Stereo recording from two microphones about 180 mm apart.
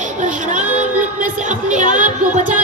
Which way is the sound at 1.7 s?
45° right (ahead or behind).